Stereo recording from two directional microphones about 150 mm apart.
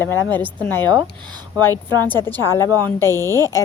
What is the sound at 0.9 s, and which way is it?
Speech, 30° right (ahead or behind).